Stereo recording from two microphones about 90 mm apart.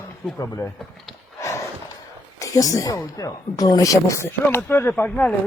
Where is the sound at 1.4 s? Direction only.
35° left (ahead or behind).